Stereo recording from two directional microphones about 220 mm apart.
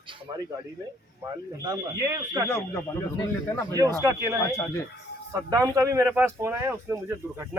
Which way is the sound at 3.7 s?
15° right (ahead or behind).